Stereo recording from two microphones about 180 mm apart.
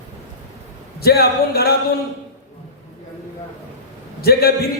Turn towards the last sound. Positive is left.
turn(degrees=60)  # may be behind; listen again after turning